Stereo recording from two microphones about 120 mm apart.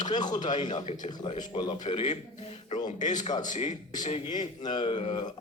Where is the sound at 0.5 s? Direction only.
45° left (ahead or behind).